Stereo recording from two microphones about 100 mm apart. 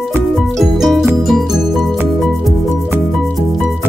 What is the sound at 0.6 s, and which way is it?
Music, centre (ahead or behind).